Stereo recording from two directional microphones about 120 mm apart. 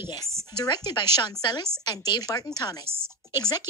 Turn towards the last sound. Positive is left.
turn(degrees=35)  # may be behind; listen again after turning